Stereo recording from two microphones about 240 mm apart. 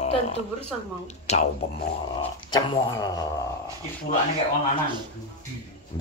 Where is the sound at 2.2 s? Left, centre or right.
Centre.